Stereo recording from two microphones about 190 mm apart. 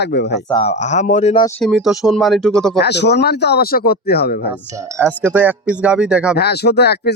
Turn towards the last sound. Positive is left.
turn(degrees=60)  # may be behind; listen again after turning